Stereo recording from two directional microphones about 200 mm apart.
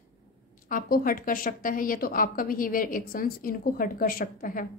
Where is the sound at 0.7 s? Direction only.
45° left (ahead or behind).